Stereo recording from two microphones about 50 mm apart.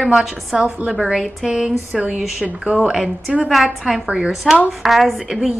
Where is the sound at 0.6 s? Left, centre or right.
Centre.